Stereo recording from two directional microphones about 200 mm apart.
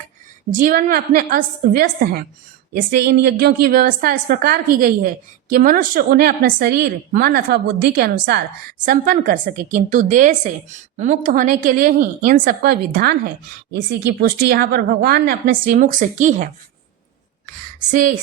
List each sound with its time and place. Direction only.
0.5 s a woman's voice: 40° right (ahead or behind)
8.8 s a woman's voice: 40° right (ahead or behind)
17.9 s a woman's voice: 40° right (ahead or behind)